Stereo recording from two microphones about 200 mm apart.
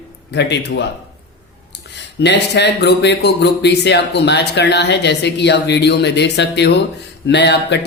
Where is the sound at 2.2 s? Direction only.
60° left (ahead or behind).